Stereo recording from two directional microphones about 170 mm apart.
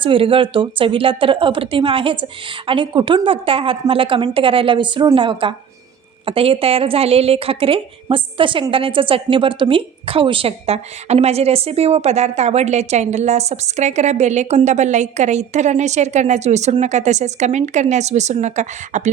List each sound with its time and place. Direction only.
0.0 s a woman's voice: 30° right (ahead or behind)